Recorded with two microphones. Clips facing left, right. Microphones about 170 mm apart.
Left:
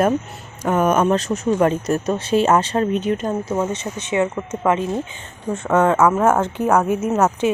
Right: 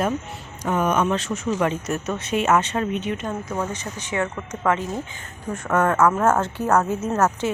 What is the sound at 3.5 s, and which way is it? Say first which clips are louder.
A woman's voice: left 5 dB; 25° left (ahead or behind).